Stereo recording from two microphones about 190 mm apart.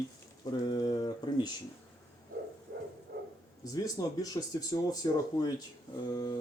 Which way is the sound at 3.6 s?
20° left (ahead or behind).